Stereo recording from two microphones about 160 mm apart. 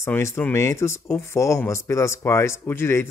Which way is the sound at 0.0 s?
15° left (ahead or behind).